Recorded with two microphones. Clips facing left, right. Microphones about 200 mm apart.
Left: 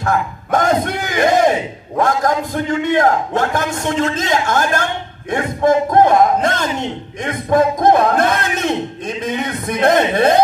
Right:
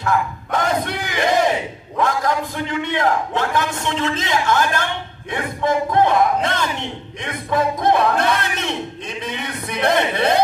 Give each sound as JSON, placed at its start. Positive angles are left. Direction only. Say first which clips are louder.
{"t": 0.0, "sound": "a man's voice", "louder": "left 2 dB", "side_deg": 45}